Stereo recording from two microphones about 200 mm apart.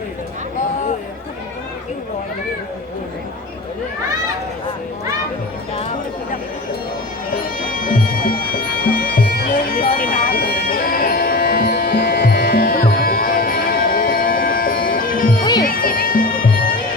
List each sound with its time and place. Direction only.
7.8 s music: 45° left (ahead or behind)